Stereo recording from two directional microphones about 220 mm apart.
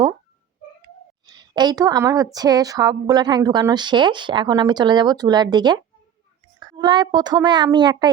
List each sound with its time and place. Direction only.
1.3 s speech: 20° right (ahead or behind)